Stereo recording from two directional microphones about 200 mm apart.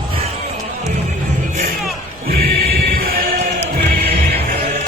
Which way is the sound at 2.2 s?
50° right (ahead or behind).